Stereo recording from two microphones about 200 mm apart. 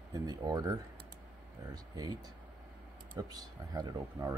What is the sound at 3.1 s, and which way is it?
Speech, 20° right (ahead or behind).